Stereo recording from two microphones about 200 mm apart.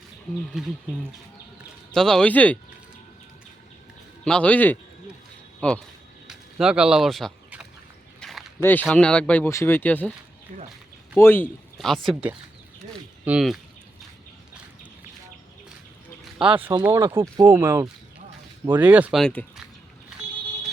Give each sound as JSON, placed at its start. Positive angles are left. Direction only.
{"t": 0.5, "sound": "speech", "side_deg": -5}
{"t": 4.2, "sound": "speech", "side_deg": 5}
{"t": 6.2, "sound": "a sound", "side_deg": -5}
{"t": 8.2, "sound": "walk", "side_deg": 0}
{"t": 8.6, "sound": "speech", "side_deg": 10}
{"t": 10.5, "sound": "speech", "side_deg": -40}
{"t": 11.2, "sound": "speech", "side_deg": 10}
{"t": 16.2, "sound": "a sound", "side_deg": -5}
{"t": 16.7, "sound": "speech", "side_deg": -15}
{"t": 19.2, "sound": "speech", "side_deg": 5}